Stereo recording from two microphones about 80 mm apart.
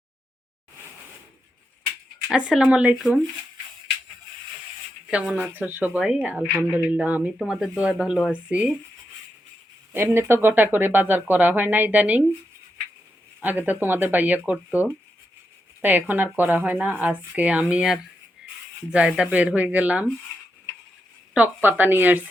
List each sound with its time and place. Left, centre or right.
2.3 s speech: centre
5.4 s speech: right
7.4 s speech: centre
9.9 s speech: right
13.4 s speech: right
18.4 s cricket: centre
18.9 s speech: centre
21.3 s speech: right